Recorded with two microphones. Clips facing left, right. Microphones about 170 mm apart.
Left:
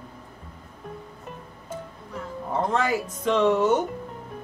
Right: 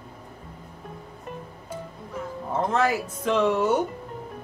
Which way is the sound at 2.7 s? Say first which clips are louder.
Right 1 dB; 5° right (ahead or behind).